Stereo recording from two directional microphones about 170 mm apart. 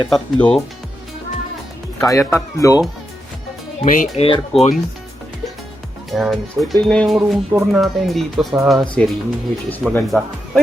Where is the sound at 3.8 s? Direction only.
50° left (ahead or behind).